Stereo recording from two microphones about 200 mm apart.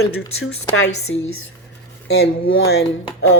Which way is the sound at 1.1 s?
75° left (ahead or behind).